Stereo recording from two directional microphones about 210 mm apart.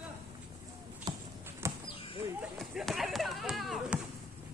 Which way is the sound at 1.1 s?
20° right (ahead or behind).